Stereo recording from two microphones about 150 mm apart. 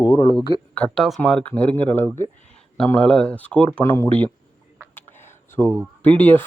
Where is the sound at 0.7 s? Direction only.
5° left (ahead or behind).